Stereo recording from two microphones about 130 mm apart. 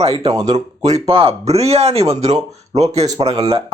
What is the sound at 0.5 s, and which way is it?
Speech, 60° right (ahead or behind).